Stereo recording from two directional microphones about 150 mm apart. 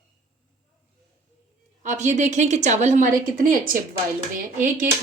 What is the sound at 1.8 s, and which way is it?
Speech, 50° right (ahead or behind).